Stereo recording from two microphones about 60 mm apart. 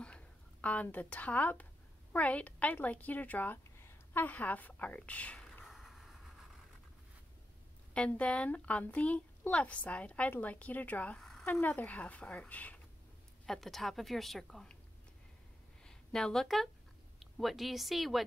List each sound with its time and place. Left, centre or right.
0.0 s a sound: left
0.9 s a woman's voice: left
3.7 s a woman's voice: left
5.7 s vehicle: centre
8.2 s a woman's voice: centre
11.1 s a sound: centre
11.6 s a woman's voice: left
13.5 s a woman's voice: centre
15.8 s a sound: centre
17.2 s speech: centre